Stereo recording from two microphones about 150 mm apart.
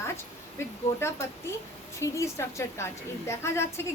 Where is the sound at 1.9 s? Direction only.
20° left (ahead or behind).